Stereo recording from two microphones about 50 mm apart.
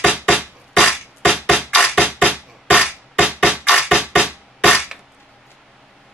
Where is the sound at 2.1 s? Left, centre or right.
Right.